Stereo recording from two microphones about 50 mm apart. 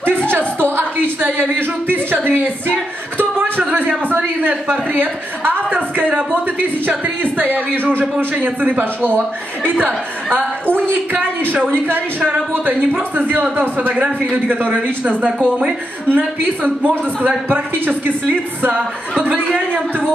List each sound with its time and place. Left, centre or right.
0.7 s a sound: right
4.1 s a woman's voice: right
5.7 s a sound: right
7.7 s a woman's voice: right
13.2 s speech: right
13.8 s a man's voice: right
14.3 s speech: right